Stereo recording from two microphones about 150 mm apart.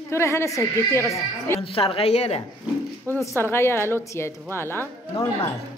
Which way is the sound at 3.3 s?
15° left (ahead or behind).